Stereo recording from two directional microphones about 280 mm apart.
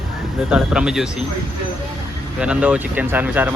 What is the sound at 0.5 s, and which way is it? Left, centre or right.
Speech, centre.